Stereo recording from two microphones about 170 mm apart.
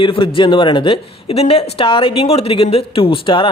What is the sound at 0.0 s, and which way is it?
A man's voice, 30° left (ahead or behind).